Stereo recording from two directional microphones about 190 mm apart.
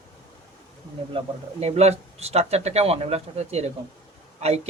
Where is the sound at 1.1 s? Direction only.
35° right (ahead or behind).